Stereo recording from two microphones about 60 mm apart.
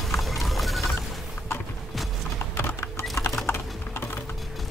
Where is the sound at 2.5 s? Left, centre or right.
Left.